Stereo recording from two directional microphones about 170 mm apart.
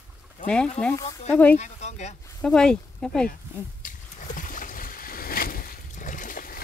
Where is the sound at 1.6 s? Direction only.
40° left (ahead or behind).